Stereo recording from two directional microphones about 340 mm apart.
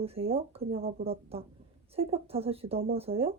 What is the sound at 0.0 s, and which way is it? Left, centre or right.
Speech, centre.